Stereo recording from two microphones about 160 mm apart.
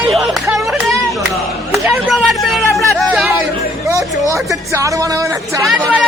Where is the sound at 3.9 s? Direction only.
20° right (ahead or behind).